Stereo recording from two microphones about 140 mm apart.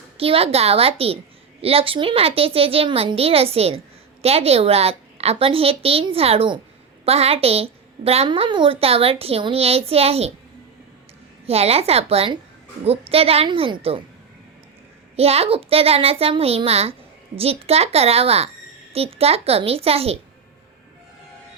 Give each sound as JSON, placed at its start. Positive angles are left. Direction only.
{"t": 0.2, "sound": "a woman's voice", "side_deg": -45}
{"t": 11.4, "sound": "a woman's voice", "side_deg": -45}
{"t": 15.1, "sound": "a woman's voice", "side_deg": -45}